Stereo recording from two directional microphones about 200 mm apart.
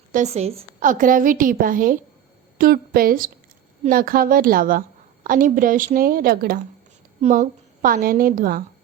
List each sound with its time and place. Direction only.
0.1 s a woman's voice: 35° right (ahead or behind)